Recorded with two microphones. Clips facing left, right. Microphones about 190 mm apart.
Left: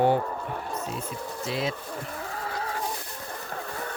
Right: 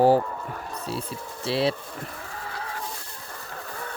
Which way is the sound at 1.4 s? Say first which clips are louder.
Right 6 dB; 30° right (ahead or behind).